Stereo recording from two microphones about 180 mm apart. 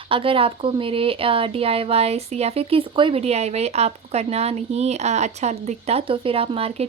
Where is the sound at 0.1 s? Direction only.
30° right (ahead or behind).